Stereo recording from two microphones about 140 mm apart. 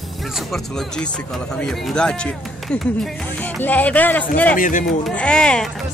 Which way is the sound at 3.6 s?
10° left (ahead or behind).